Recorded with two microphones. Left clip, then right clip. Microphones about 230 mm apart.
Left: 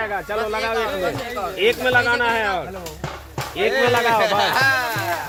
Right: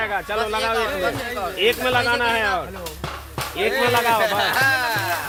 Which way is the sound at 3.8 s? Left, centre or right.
Centre.